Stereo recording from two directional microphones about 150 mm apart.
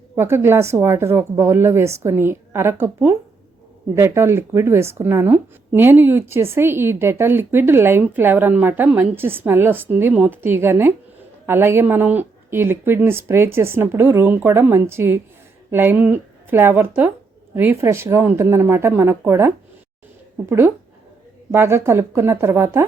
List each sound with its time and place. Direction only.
0.2 s speech: 15° right (ahead or behind)